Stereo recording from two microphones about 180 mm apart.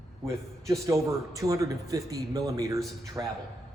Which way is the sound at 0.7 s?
15° right (ahead or behind).